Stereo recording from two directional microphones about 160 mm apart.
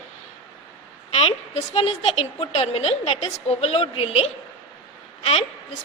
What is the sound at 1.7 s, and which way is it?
A woman's voice, 35° left (ahead or behind).